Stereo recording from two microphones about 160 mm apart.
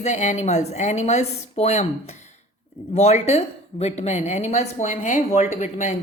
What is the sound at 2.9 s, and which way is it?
A woman's voice, 40° left (ahead or behind).